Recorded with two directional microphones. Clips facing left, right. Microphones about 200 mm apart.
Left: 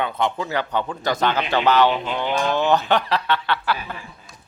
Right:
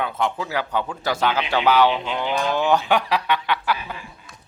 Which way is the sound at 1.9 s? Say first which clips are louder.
Left 1 dB; 5° left (ahead or behind).